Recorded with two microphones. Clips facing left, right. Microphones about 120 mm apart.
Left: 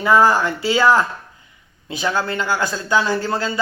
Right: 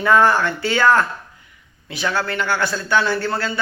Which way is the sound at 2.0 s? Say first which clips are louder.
Left 1 dB; 25° left (ahead or behind).